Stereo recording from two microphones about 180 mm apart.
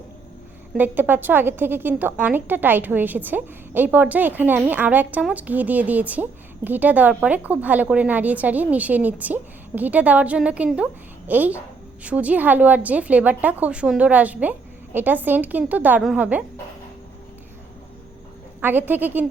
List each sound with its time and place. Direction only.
0.8 s a woman's voice: 10° right (ahead or behind)
18.6 s a woman's voice: 10° right (ahead or behind)